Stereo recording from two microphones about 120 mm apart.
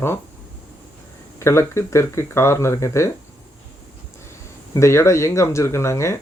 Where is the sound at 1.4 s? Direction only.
25° left (ahead or behind).